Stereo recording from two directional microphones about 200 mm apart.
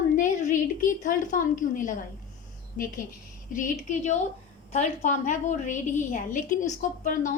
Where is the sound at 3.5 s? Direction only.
40° left (ahead or behind).